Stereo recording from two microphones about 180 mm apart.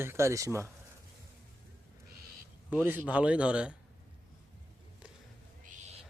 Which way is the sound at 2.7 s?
10° right (ahead or behind).